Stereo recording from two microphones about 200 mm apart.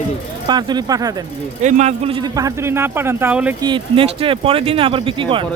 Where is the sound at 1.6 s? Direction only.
35° right (ahead or behind); by 3.6 s 5° right (ahead or behind).